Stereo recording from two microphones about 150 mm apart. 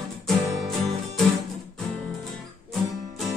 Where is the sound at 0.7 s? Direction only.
Centre (ahead or behind).